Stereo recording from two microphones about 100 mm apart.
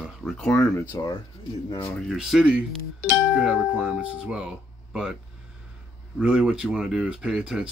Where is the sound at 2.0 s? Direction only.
Centre (ahead or behind).